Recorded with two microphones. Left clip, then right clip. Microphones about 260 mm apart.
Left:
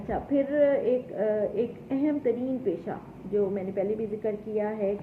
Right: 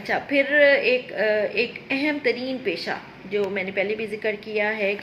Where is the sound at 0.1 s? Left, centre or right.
Centre.